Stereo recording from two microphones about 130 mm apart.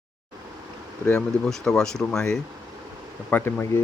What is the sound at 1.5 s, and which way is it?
Speech, 5° left (ahead or behind).